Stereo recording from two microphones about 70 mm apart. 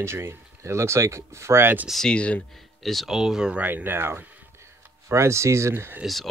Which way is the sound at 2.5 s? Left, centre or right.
Centre.